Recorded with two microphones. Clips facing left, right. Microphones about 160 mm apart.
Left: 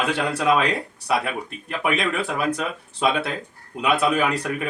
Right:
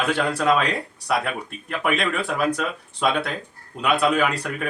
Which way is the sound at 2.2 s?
10° left (ahead or behind).